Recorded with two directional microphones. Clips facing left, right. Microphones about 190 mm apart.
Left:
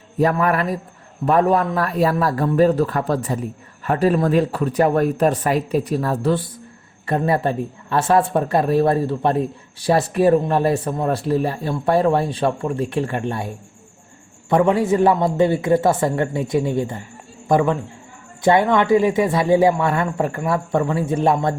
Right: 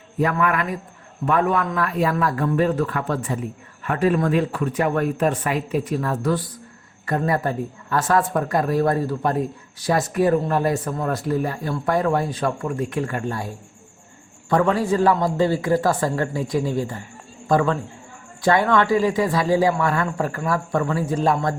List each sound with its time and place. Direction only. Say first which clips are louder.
0.2 s speech: left 3 dB; 35° left (ahead or behind)
14.5 s speech: left 3 dB; 20° left (ahead or behind)